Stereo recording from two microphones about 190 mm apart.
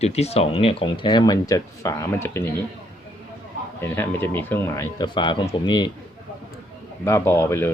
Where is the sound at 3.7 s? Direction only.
10° left (ahead or behind).